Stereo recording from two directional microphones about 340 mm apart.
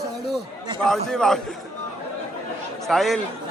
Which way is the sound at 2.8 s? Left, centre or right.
Centre.